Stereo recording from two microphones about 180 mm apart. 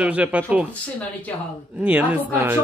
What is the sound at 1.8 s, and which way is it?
Speech, 10° right (ahead or behind).